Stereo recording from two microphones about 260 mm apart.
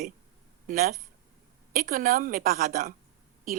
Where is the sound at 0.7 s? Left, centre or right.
Right.